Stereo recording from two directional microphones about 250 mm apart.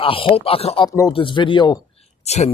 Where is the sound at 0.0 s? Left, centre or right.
Left.